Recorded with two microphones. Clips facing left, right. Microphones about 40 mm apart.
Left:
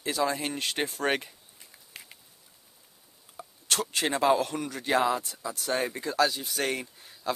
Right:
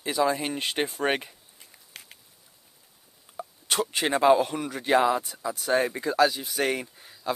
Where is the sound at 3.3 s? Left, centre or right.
Centre.